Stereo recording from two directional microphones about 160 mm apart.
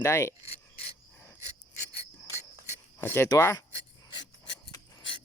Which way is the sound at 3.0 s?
15° left (ahead or behind).